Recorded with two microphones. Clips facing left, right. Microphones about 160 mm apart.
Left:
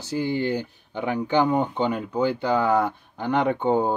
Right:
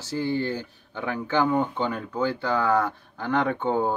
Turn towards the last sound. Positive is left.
turn(degrees=15)  # may be behind; listen again after turning